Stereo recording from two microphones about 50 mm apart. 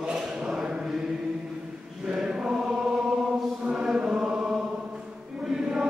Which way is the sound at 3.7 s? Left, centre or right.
Centre.